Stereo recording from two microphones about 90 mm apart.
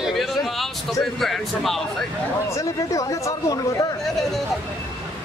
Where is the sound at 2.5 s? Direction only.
35° left (ahead or behind).